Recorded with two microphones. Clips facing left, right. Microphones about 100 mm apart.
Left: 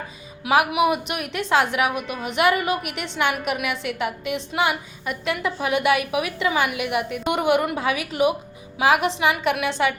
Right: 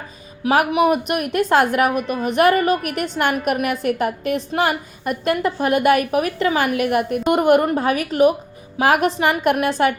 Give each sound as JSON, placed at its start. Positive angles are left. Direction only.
{"t": 0.4, "sound": "a woman's voice", "side_deg": -40}